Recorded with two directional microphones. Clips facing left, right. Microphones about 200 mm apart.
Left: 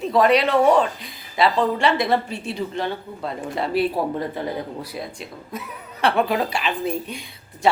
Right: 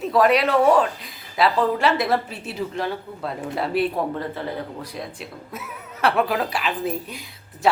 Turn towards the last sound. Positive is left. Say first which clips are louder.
# left 1 dB
turn(degrees=0)  # may be behind; listen again after turning